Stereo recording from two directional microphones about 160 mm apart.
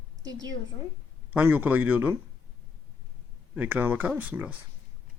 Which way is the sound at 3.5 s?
10° right (ahead or behind).